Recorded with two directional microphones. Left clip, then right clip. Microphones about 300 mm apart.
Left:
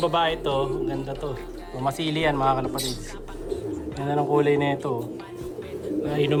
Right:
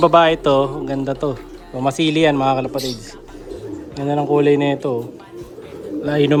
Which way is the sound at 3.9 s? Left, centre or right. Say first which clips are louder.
Right 6 dB; centre.